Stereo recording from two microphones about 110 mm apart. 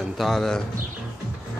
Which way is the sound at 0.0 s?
Centre (ahead or behind).